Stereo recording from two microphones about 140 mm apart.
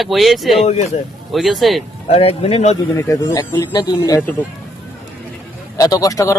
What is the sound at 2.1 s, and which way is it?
Speech, 45° left (ahead or behind).